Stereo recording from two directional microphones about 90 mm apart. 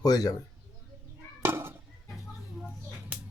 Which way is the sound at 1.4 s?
25° right (ahead or behind).